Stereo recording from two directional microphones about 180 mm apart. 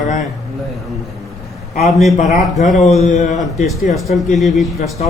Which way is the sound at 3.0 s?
40° left (ahead or behind).